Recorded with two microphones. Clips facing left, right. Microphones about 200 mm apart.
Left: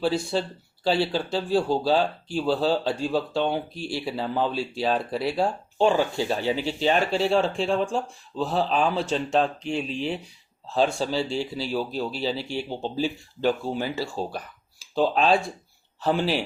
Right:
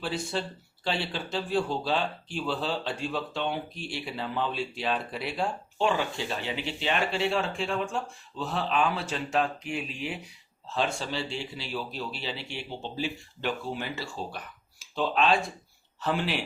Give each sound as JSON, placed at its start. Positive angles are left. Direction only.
{"t": 0.0, "sound": "speech", "side_deg": 35}